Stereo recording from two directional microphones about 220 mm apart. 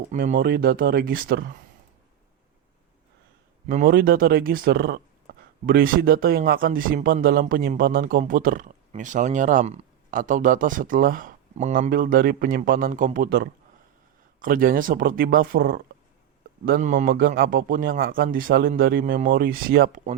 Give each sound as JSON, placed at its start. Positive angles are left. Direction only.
{"t": 0.1, "sound": "speech", "side_deg": -35}
{"t": 3.7, "sound": "speech", "side_deg": -40}
{"t": 16.6, "sound": "speech", "side_deg": -40}